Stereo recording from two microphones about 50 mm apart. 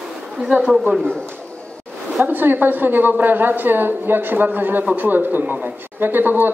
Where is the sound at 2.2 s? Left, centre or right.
Right.